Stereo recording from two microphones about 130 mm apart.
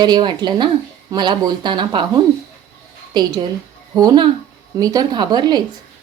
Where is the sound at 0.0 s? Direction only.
35° right (ahead or behind).